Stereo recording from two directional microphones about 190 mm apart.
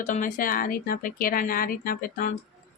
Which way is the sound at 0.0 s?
45° left (ahead or behind).